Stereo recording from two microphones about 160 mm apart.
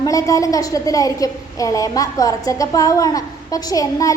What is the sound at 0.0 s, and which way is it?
A woman's voice, 20° left (ahead or behind).